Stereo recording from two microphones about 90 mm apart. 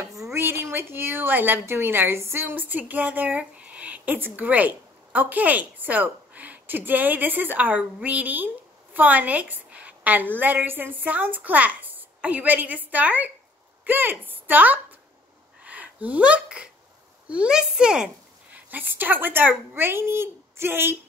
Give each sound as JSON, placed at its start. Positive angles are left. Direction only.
{"t": 0.3, "sound": "a woman's voice", "side_deg": -25}